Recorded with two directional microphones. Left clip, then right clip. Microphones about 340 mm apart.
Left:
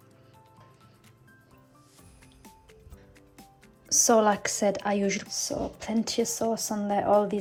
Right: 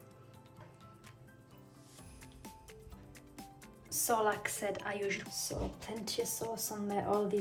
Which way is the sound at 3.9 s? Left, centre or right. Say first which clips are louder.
Left 11 dB; centre.